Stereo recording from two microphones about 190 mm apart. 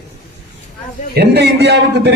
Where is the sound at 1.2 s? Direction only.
60° right (ahead or behind).